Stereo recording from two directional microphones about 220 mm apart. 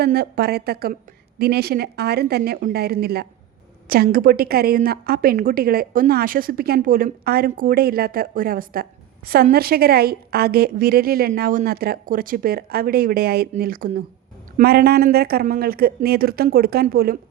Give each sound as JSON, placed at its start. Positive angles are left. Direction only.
{"t": 0.0, "sound": "a woman's voice", "side_deg": -45}